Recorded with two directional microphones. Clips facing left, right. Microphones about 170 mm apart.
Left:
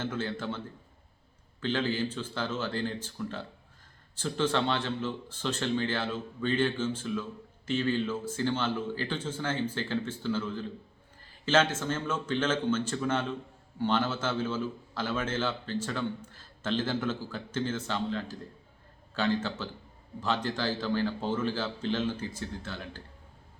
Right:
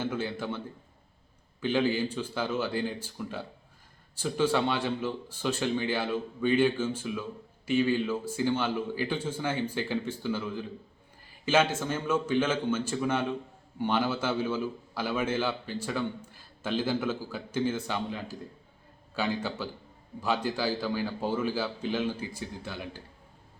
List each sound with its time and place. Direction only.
0.0 s a man's voice: 10° right (ahead or behind)
1.6 s a man's voice: 15° right (ahead or behind)